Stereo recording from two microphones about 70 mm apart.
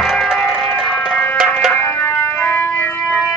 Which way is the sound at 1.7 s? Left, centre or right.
Left.